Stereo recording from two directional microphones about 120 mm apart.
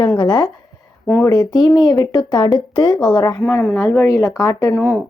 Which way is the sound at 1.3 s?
30° left (ahead or behind).